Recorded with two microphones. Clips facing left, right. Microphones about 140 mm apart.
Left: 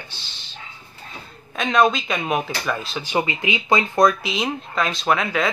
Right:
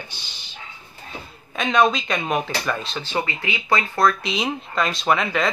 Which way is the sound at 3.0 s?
20° left (ahead or behind).